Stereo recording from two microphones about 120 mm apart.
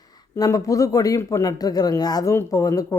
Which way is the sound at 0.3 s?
30° left (ahead or behind).